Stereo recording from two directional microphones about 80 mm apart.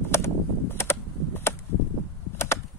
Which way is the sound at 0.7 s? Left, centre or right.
Left.